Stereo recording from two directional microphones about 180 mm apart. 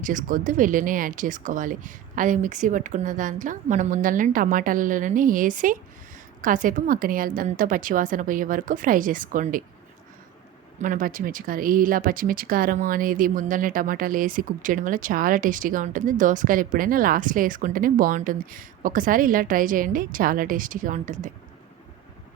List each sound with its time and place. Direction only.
0.0 s speech: 50° right (ahead or behind)
10.8 s speech: 50° right (ahead or behind)